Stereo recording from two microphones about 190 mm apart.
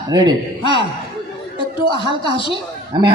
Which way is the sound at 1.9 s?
25° right (ahead or behind).